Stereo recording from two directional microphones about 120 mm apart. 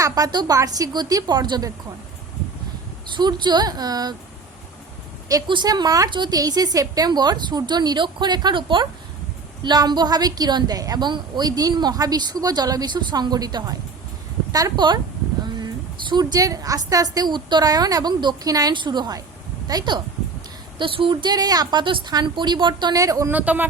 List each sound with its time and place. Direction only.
0.0 s a woman's voice: 35° right (ahead or behind)
3.1 s a woman's voice: 40° right (ahead or behind)
5.5 s a woman's voice: 40° right (ahead or behind)
23.3 s speech: 15° right (ahead or behind)